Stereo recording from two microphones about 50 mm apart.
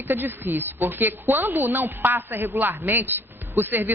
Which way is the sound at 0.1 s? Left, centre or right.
Right.